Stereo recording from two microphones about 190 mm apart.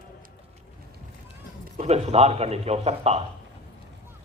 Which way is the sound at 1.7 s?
35° right (ahead or behind).